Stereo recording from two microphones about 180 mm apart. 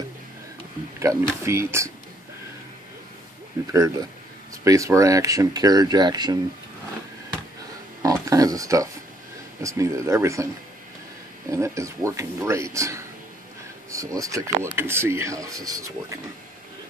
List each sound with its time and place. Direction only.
0.9 s speech: 15° right (ahead or behind)
3.7 s speech: 20° right (ahead or behind)
8.3 s speech: 20° right (ahead or behind)
11.5 s speech: 15° right (ahead or behind)